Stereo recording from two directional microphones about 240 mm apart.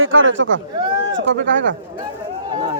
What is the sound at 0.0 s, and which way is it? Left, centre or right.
Speech, right.